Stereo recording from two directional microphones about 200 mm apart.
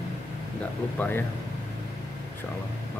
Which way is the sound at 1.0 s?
10° left (ahead or behind).